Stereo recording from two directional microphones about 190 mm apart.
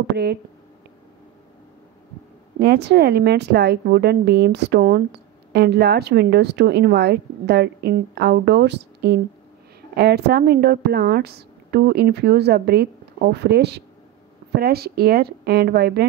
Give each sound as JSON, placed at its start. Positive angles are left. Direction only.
{"t": 0.0, "sound": "a woman's voice", "side_deg": -60}
{"t": 2.6, "sound": "a woman's voice", "side_deg": -60}